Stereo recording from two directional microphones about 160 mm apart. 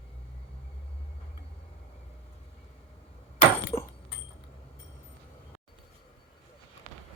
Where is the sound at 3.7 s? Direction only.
15° left (ahead or behind).